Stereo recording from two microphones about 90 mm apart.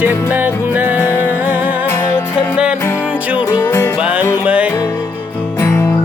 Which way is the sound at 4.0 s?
15° right (ahead or behind).